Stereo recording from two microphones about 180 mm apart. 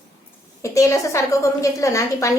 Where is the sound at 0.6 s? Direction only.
15° left (ahead or behind).